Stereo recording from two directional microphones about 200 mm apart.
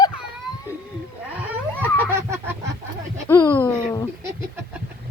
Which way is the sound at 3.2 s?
10° left (ahead or behind).